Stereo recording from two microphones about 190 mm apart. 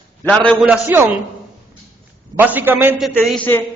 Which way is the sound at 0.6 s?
5° right (ahead or behind).